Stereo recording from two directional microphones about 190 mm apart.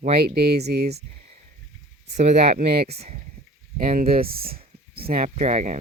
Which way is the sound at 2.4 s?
60° right (ahead or behind).